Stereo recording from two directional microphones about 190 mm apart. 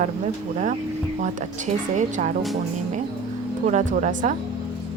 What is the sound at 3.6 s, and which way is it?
Speech, 40° right (ahead or behind).